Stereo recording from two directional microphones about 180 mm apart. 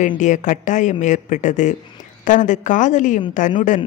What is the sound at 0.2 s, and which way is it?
A woman's voice, 45° left (ahead or behind).